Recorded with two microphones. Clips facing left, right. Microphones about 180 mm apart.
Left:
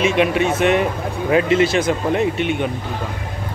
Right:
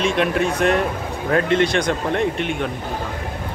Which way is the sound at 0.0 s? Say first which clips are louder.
Left 2 dB; 5° left (ahead or behind).